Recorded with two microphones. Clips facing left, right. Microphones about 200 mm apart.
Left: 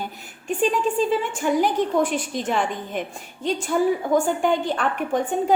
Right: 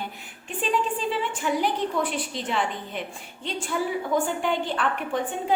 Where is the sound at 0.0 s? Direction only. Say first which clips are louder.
Left 3 dB; 45° left (ahead or behind).